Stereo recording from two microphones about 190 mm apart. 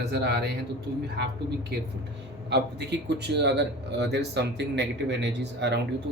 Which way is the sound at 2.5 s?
60° right (ahead or behind).